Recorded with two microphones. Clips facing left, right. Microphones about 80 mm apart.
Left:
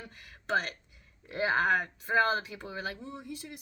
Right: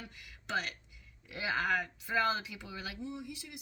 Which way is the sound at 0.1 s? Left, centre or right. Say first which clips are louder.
Left 7 dB; left.